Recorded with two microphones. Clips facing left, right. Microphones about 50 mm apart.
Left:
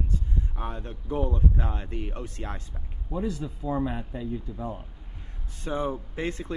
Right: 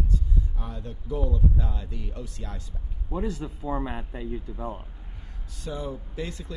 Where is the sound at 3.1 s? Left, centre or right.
Right.